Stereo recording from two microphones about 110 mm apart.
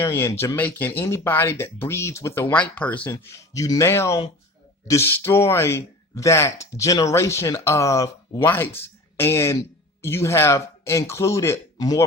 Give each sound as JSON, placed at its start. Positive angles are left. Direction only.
{"t": 0.0, "sound": "speech", "side_deg": 25}
{"t": 3.1, "sound": "speech", "side_deg": 25}
{"t": 8.4, "sound": "speech", "side_deg": 20}